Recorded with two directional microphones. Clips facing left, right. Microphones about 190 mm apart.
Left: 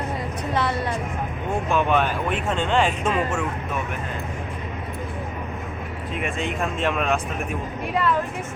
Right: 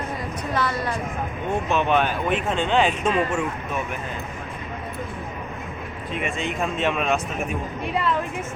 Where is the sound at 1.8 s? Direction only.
5° left (ahead or behind).